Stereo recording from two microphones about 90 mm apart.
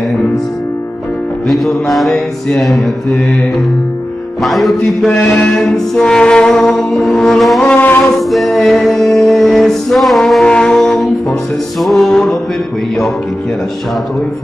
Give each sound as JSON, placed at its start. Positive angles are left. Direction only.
{"t": 1.5, "sound": "music", "side_deg": 0}
{"t": 4.4, "sound": "music", "side_deg": 0}
{"t": 5.1, "sound": "music", "side_deg": 10}
{"t": 7.6, "sound": "music", "side_deg": 15}
{"t": 8.3, "sound": "music", "side_deg": 0}